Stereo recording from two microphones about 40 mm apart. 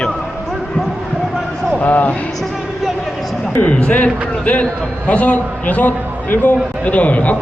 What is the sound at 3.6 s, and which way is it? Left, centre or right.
A man's voice, left.